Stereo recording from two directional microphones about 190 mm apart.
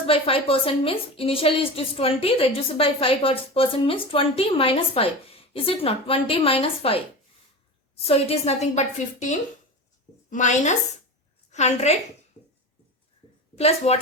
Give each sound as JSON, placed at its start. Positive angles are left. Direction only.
{"t": 0.0, "sound": "a woman's voice", "side_deg": 30}
{"t": 8.0, "sound": "a woman's voice", "side_deg": 30}
{"t": 10.2, "sound": "a woman's voice", "side_deg": 40}
{"t": 12.4, "sound": "a sound", "side_deg": 5}
{"t": 13.6, "sound": "a woman's voice", "side_deg": 35}